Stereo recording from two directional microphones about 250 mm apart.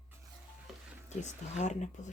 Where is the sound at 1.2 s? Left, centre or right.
Left.